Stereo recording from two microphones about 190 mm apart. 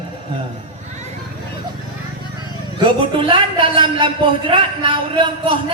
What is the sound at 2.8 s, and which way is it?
Speech, 25° right (ahead or behind).